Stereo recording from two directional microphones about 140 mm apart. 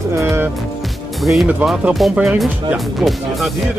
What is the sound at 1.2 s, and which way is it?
Speech, centre (ahead or behind).